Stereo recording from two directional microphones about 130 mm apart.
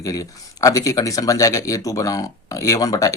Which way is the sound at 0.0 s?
25° left (ahead or behind).